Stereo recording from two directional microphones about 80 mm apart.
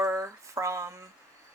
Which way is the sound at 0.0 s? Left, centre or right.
Right.